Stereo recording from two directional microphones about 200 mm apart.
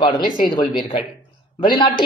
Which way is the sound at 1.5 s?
25° left (ahead or behind).